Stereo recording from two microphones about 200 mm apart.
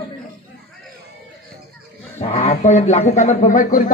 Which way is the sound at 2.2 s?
35° left (ahead or behind).